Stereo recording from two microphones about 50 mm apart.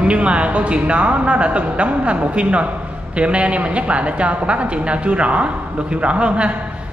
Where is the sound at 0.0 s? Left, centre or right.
Right.